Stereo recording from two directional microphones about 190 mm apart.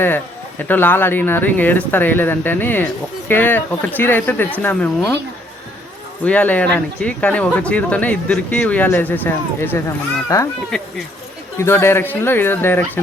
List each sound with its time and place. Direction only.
0.7 s speech: 10° left (ahead or behind)
6.2 s speech: 10° left (ahead or behind)
10.7 s speech: 5° left (ahead or behind)